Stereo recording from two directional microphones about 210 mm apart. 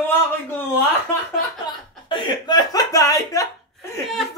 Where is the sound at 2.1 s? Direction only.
20° left (ahead or behind).